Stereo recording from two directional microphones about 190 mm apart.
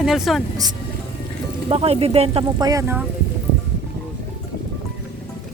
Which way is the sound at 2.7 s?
15° right (ahead or behind).